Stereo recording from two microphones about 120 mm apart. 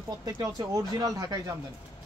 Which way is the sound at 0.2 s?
25° right (ahead or behind).